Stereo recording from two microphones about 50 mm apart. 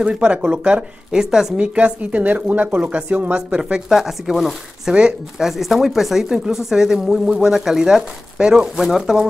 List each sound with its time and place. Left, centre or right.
0.0 s speech: right
1.1 s speech: centre
1.6 s speech: right
3.3 s speech: right
3.9 s speech: centre